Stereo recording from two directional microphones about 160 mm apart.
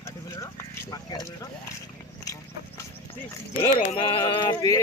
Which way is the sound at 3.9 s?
30° left (ahead or behind).